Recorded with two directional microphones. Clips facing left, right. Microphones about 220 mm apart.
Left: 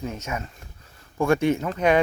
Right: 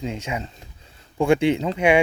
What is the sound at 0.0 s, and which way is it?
Speech, 15° right (ahead or behind).